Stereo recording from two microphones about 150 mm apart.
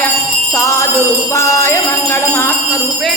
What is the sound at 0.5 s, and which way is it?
Jingle bell, 20° left (ahead or behind).